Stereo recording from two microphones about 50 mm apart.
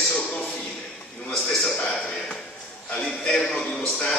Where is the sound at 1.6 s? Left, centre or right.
Centre.